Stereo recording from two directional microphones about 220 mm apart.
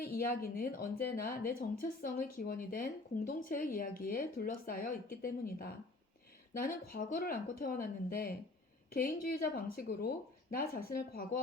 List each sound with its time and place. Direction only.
0.0 s a woman's voice: 45° left (ahead or behind)